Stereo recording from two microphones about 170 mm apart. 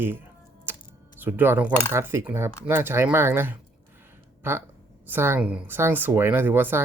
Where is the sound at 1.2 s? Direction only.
10° right (ahead or behind).